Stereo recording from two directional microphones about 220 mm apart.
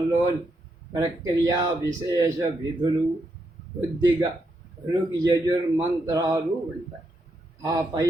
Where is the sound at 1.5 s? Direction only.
15° right (ahead or behind).